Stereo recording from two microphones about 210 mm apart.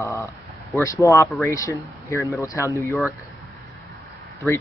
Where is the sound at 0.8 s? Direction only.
15° left (ahead or behind).